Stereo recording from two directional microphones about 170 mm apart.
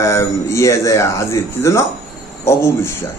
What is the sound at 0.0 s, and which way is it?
A man's voice, 15° left (ahead or behind).